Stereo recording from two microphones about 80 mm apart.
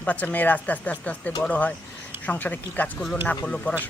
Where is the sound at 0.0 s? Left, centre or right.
Centre.